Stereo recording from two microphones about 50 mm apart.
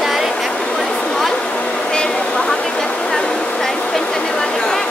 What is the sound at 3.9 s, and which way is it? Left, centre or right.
Vehicle, centre.